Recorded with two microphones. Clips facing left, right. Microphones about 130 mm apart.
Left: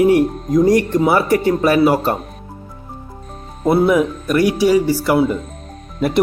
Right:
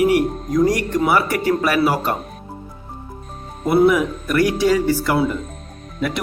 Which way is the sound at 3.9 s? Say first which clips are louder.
Left 4 dB; 20° left (ahead or behind).